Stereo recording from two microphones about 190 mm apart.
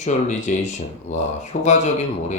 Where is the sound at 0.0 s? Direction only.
40° left (ahead or behind).